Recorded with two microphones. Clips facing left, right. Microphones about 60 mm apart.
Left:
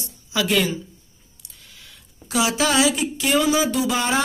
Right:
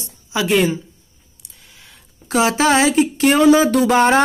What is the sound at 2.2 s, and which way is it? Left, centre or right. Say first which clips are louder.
Speech: right 6 dB; right.